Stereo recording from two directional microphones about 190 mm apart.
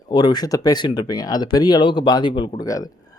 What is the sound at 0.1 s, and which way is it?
A man's voice, 20° left (ahead or behind).